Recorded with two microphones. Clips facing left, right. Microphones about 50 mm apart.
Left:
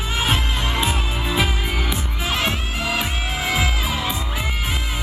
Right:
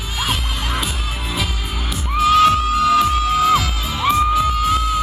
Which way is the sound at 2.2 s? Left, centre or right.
Left.